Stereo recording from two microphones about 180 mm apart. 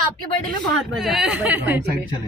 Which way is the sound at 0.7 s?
Centre (ahead or behind).